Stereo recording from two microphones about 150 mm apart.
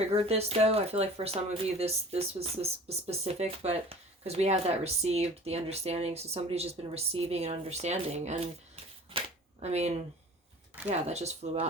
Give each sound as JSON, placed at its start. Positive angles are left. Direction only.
{"t": 0.0, "sound": "speech", "side_deg": -45}
{"t": 9.1, "sound": "a sound", "side_deg": -45}
{"t": 10.8, "sound": "speech", "side_deg": -45}